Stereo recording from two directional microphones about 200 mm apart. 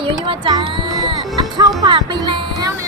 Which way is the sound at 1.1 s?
20° right (ahead or behind).